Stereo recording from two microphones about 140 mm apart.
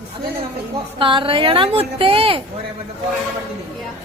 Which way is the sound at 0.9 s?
40° right (ahead or behind).